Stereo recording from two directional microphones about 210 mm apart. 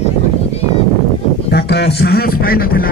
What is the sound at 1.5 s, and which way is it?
A man's voice, 50° left (ahead or behind).